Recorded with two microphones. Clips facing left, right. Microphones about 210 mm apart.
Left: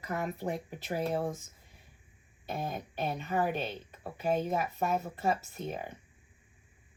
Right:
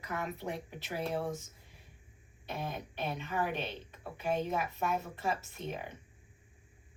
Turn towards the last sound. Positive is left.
turn(degrees=40)  # may be behind; listen again after turning